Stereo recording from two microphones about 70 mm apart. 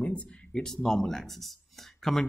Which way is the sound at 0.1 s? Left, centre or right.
Centre.